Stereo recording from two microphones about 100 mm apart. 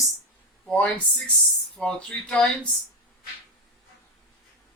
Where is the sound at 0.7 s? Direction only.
10° left (ahead or behind).